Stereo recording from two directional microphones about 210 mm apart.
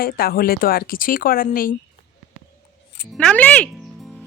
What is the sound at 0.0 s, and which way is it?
Speech, 45° left (ahead or behind).